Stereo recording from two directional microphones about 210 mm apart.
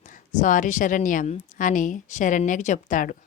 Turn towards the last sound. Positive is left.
turn(degrees=40)  # may be behind; listen again after turning